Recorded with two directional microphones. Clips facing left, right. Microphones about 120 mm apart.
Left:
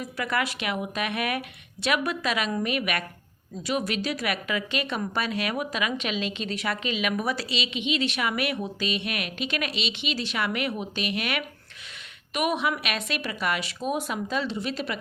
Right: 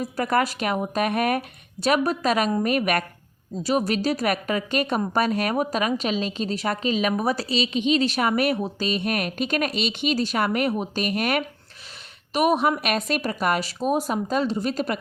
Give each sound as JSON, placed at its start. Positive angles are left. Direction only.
{"t": 0.0, "sound": "a woman's voice", "side_deg": -40}